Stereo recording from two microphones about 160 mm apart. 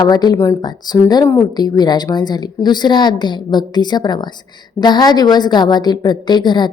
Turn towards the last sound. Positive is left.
turn(degrees=25)  # may be behind; listen again after turning